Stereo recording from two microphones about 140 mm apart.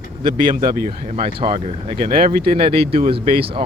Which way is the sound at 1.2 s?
40° right (ahead or behind).